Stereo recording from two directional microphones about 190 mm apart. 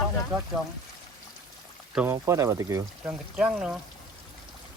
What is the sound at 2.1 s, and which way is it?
Speech, 15° right (ahead or behind).